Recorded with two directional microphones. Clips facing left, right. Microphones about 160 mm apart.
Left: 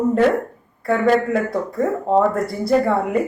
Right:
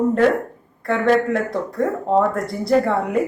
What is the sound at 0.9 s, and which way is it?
Speech, 5° left (ahead or behind).